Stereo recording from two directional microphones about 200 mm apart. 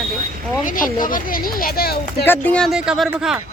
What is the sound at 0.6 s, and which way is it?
Speech, 40° left (ahead or behind).